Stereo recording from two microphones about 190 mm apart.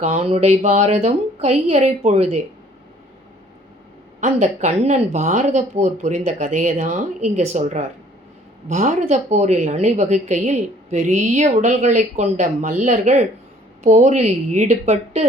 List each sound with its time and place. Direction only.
0.0 s speech: 35° right (ahead or behind)
4.2 s speech: 40° right (ahead or behind)